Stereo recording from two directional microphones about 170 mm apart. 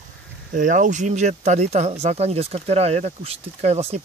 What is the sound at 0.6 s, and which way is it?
Speech, 50° right (ahead or behind).